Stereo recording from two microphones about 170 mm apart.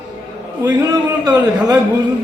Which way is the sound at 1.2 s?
25° right (ahead or behind).